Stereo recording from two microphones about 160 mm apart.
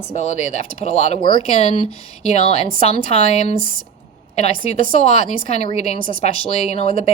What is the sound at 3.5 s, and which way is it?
Speech, 55° right (ahead or behind).